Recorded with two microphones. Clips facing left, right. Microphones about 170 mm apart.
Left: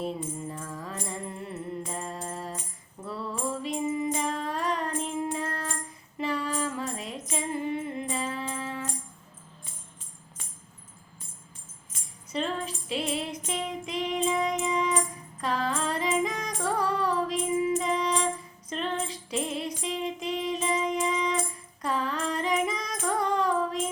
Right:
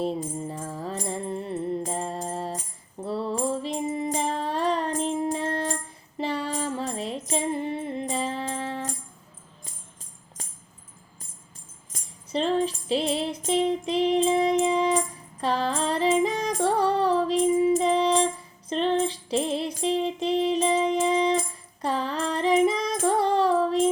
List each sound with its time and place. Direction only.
0.0 s music: 30° right (ahead or behind)
11.9 s music: 30° right (ahead or behind)